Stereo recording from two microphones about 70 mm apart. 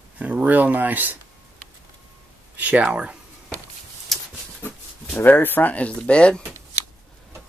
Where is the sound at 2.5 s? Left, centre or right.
Right.